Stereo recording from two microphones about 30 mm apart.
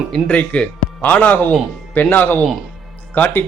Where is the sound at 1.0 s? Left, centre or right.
Left.